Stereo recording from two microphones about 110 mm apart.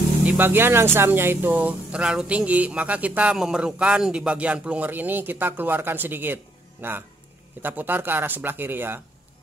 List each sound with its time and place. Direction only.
0.2 s speech: 15° right (ahead or behind)